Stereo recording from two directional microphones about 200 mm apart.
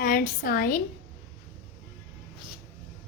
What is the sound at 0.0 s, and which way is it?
Speech, 45° left (ahead or behind).